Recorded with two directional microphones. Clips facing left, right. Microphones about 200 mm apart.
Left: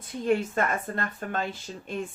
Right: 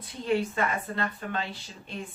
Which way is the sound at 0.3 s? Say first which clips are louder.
Left 2 dB; 45° left (ahead or behind).